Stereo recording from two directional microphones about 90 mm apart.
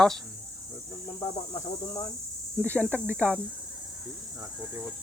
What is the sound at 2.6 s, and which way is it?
Speech, 15° left (ahead or behind).